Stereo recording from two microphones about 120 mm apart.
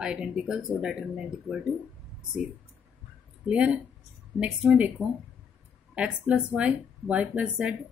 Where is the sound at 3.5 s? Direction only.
15° right (ahead or behind).